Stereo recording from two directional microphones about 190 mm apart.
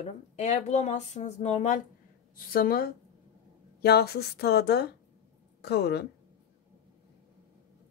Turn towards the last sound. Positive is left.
turn(degrees=60)  # may be behind; listen again after turning